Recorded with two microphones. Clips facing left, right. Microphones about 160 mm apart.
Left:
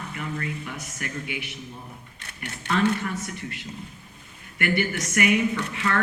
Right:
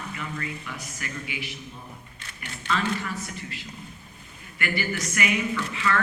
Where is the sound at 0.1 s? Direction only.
50° left (ahead or behind).